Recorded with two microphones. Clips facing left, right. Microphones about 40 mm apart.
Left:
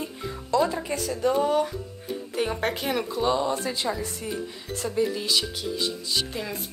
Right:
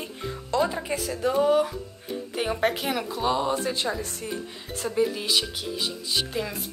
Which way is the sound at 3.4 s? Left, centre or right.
Right.